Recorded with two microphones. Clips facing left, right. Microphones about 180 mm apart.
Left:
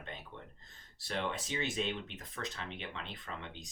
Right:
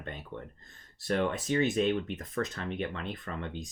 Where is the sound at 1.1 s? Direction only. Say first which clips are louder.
Right 9 dB; 50° right (ahead or behind).